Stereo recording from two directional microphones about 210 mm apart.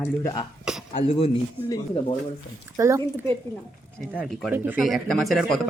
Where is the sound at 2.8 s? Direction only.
15° right (ahead or behind).